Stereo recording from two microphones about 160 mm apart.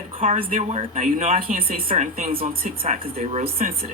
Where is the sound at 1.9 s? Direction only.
50° right (ahead or behind).